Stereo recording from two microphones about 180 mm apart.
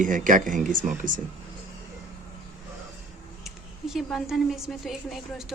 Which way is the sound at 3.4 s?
Centre (ahead or behind).